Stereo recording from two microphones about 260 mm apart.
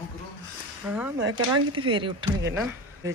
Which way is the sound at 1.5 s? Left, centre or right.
Centre.